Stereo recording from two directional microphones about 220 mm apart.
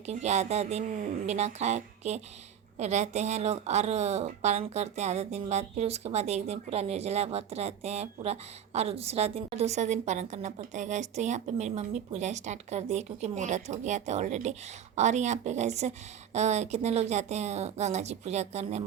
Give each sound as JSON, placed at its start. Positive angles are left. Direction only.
{"t": 0.0, "sound": "a woman's voice", "side_deg": -30}